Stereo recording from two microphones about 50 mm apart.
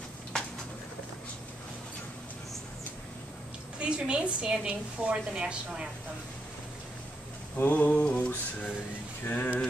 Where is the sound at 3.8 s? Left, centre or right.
Right.